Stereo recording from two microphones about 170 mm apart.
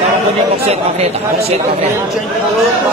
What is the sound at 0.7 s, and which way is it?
Speech, 40° right (ahead or behind).